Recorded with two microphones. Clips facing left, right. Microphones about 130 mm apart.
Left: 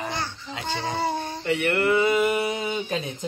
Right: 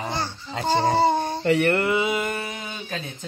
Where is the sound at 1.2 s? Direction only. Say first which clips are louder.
Right 5 dB; 35° right (ahead or behind).